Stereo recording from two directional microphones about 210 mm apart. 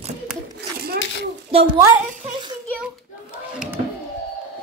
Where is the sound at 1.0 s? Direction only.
60° left (ahead or behind).